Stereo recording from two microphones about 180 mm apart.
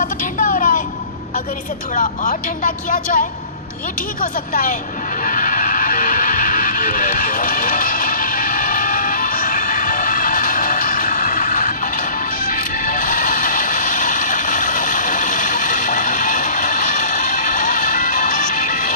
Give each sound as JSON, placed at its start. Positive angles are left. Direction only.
{"t": 0.0, "sound": "vehicle", "side_deg": 50}
{"t": 2.0, "sound": "speech", "side_deg": 45}
{"t": 5.2, "sound": "music", "side_deg": 45}